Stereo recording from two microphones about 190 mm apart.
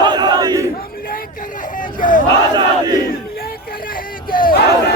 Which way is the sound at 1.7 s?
45° left (ahead or behind).